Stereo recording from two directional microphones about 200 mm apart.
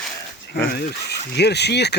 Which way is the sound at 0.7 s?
55° left (ahead or behind).